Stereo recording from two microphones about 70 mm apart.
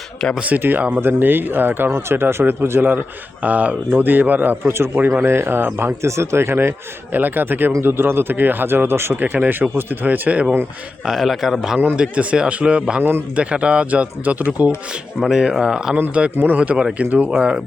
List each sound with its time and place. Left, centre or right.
0.3 s speech: right
3.4 s speech: right
9.2 s speech: right
11.0 s speech: centre
11.9 s speech: centre
13.0 s speech: right
13.3 s speech: centre
15.2 s speech: centre
16.3 s speech: right
16.7 s speech: centre